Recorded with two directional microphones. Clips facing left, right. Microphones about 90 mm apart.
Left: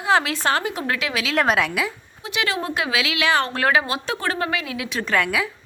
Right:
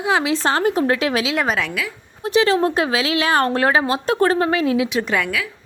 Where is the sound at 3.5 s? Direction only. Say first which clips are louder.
Right 3 dB; 30° right (ahead or behind).